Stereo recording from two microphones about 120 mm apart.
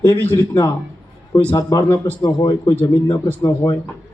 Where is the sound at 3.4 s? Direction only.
30° left (ahead or behind).